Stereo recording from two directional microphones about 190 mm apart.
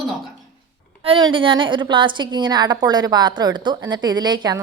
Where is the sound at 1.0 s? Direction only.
25° right (ahead or behind).